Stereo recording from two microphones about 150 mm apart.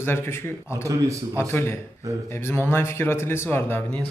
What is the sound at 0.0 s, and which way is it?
Speech, 15° left (ahead or behind).